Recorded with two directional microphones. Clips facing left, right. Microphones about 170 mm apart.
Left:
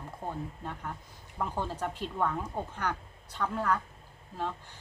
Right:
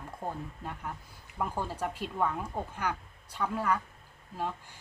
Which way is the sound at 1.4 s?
10° right (ahead or behind).